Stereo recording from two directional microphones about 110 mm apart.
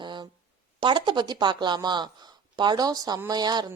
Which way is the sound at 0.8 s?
45° right (ahead or behind).